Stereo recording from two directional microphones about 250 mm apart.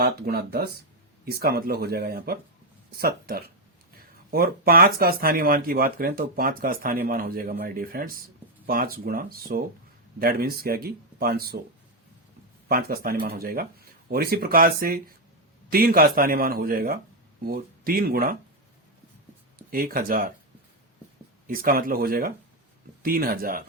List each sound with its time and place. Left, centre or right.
0.0 s speech: right
12.6 s speech: right
19.7 s speech: right
21.4 s speech: right